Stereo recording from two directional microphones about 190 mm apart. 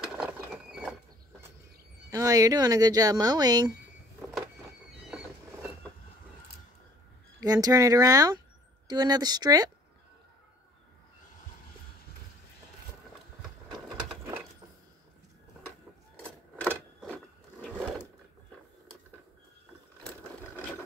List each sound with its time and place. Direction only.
0.0 s squeal: 5° right (ahead or behind)
2.0 s speech: 20° right (ahead or behind)
7.3 s speech: 20° right (ahead or behind)
16.2 s a sound: 10° left (ahead or behind)